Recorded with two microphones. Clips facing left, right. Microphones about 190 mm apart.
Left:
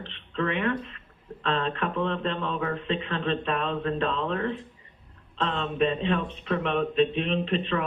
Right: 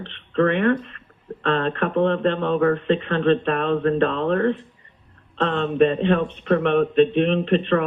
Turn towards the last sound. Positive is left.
turn(degrees=-55)  # may be behind; listen again after turning